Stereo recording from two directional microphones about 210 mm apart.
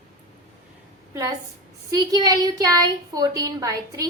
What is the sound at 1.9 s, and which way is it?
Speech, 15° right (ahead or behind).